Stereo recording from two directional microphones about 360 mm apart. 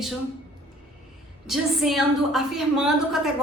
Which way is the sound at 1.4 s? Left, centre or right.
Centre.